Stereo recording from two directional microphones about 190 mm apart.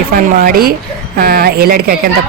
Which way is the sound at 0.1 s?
50° right (ahead or behind).